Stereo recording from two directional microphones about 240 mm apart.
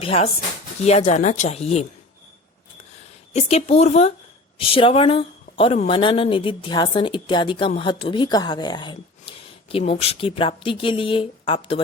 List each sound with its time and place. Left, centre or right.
0.0 s a woman's voice: left
3.3 s a woman's voice: left